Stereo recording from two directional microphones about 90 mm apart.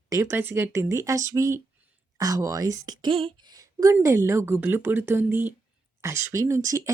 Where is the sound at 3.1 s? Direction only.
90° right.